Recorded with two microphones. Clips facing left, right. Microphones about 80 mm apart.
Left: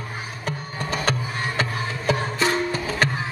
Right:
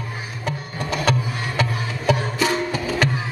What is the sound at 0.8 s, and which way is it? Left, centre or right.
Music, left.